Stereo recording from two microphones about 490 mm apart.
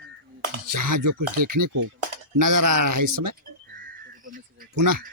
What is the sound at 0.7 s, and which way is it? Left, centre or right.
Speech, right.